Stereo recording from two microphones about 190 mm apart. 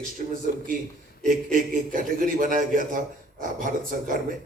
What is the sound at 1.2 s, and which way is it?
A man's voice, 45° right (ahead or behind).